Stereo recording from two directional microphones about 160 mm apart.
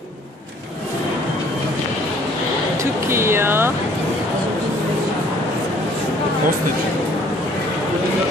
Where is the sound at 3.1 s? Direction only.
15° right (ahead or behind).